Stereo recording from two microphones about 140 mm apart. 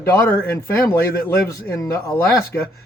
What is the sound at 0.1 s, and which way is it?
Speech, 10° left (ahead or behind).